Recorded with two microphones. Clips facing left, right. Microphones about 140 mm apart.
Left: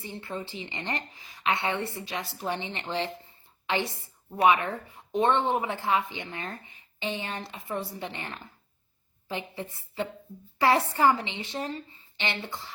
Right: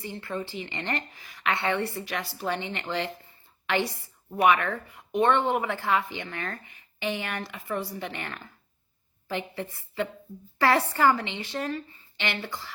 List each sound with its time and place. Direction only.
0.3 s a woman's voice: 20° left (ahead or behind)